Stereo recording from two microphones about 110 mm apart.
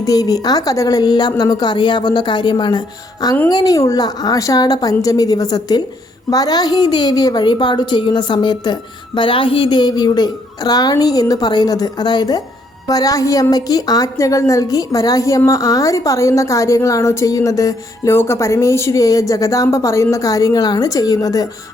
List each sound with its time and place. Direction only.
0.0 s a woman's voice: 35° left (ahead or behind)